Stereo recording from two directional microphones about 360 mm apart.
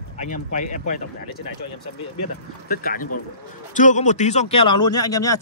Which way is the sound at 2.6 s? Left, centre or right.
Left.